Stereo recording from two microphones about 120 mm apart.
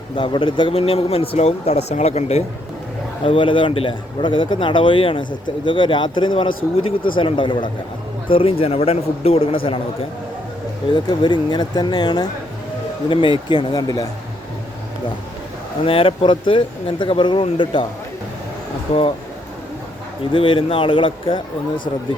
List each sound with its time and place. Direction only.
0.2 s a man's voice: 45° left (ahead or behind); by 2.4 s 60° left (ahead or behind)
3.2 s a man's voice: 45° left (ahead or behind)
15.8 s a man's voice: 50° left (ahead or behind)
18.9 s speech: 65° left (ahead or behind)
20.3 s a man's voice: 45° left (ahead or behind)